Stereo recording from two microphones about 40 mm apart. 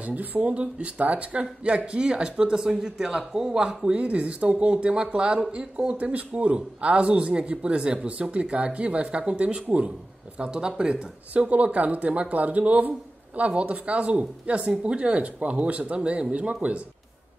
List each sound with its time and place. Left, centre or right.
0.0 s a man's voice: right
0.5 s a man's voice: right
4.0 s speech: right
5.9 s a man's voice: right
9.7 s a man's voice: right
10.4 s a man's voice: right